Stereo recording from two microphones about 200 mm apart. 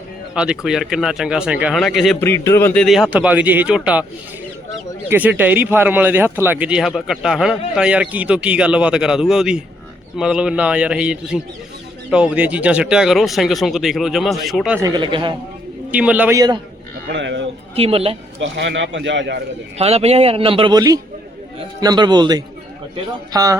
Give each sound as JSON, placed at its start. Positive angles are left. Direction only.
{"t": 0.3, "sound": "speech", "side_deg": -5}
{"t": 2.2, "sound": "speech", "side_deg": 15}
{"t": 2.8, "sound": "speech", "side_deg": 0}
{"t": 5.0, "sound": "speech", "side_deg": -10}
{"t": 14.8, "sound": "a man's voice", "side_deg": -20}
{"t": 15.9, "sound": "speech", "side_deg": -5}
{"t": 17.1, "sound": "speech", "side_deg": -65}
{"t": 17.7, "sound": "a man's voice", "side_deg": -30}
{"t": 18.3, "sound": "speech", "side_deg": -65}
{"t": 19.8, "sound": "a man's voice", "side_deg": -30}